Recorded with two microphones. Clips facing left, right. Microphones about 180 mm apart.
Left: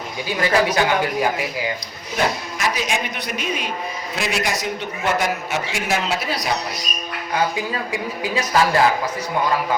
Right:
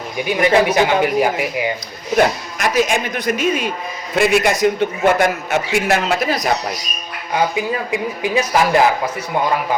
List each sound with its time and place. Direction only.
0.3 s speech: 20° right (ahead or behind)
2.1 s speech: 55° right (ahead or behind)
4.1 s a man's voice: 55° right (ahead or behind)
8.4 s speech: 20° right (ahead or behind)